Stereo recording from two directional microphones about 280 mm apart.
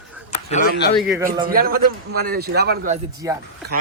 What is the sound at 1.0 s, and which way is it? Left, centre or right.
Speech, centre.